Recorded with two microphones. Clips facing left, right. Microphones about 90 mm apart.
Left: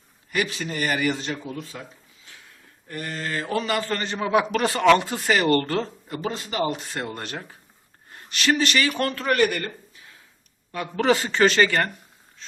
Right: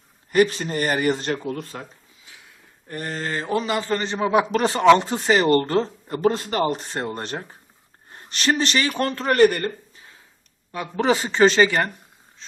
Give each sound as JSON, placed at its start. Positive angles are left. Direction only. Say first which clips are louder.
{"t": 0.3, "sound": "speech", "louder": "right 8 dB", "side_deg": -40}
{"t": 1.2, "sound": "speech", "louder": "right 5 dB", "side_deg": -50}
{"t": 2.8, "sound": "speech", "louder": "right 2 dB", "side_deg": -30}
{"t": 3.5, "sound": "a man's voice", "louder": "right 2 dB", "side_deg": -20}
{"t": 6.2, "sound": "speech", "louder": "right 6 dB", "side_deg": -45}
{"t": 10.9, "sound": "speech", "louder": "right 1 dB", "side_deg": -15}